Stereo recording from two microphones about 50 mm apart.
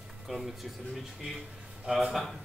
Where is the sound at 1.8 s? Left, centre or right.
Centre.